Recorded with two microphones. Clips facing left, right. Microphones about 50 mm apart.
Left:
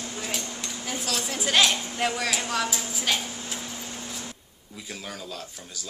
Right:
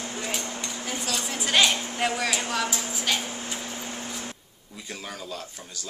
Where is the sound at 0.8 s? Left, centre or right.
Centre.